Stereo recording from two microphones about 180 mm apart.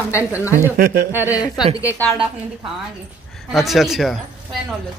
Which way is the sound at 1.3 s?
20° left (ahead or behind).